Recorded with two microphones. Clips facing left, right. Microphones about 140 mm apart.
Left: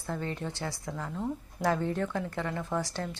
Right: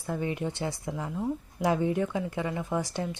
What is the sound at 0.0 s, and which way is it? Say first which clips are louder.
A woman's voice: right 4 dB; 15° right (ahead or behind).